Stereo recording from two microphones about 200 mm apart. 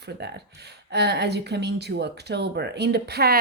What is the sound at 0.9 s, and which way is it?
A woman's voice, 55° right (ahead or behind).